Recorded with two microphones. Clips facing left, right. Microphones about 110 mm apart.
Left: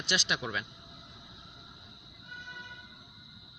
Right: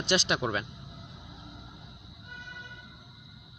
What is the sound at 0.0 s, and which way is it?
Speech, 30° right (ahead or behind).